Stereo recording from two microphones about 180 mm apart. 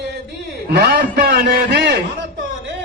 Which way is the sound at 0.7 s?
60° right (ahead or behind).